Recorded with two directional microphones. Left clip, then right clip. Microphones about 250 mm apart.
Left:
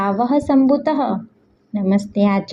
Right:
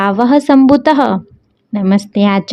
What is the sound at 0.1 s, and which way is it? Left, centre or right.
A woman's voice, right.